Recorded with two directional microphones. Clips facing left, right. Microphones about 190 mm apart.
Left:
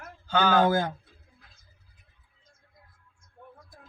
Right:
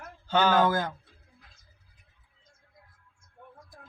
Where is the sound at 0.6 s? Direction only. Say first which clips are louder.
Left 2 dB; 25° left (ahead or behind).